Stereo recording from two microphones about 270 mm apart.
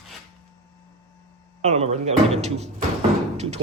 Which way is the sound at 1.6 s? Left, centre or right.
Right.